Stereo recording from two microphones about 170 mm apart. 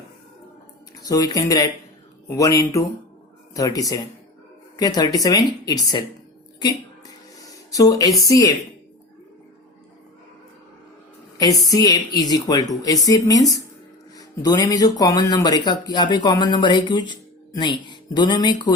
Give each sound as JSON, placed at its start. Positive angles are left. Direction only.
{"t": 1.0, "sound": "speech", "side_deg": 20}
{"t": 7.4, "sound": "speech", "side_deg": 20}
{"t": 11.7, "sound": "speech", "side_deg": 20}